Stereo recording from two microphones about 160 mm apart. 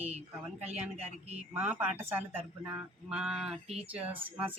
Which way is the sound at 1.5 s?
10° right (ahead or behind).